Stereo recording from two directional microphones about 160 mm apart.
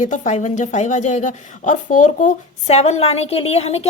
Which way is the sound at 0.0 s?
50° left (ahead or behind).